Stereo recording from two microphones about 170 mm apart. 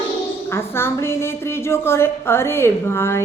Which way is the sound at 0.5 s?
15° left (ahead or behind).